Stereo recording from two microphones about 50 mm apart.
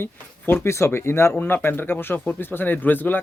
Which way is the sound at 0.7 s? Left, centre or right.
Left.